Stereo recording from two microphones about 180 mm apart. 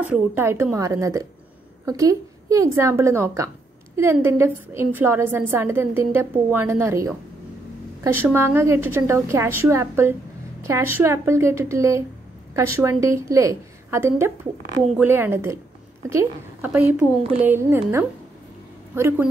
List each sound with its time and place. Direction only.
0.0 s a woman's voice: 10° right (ahead or behind)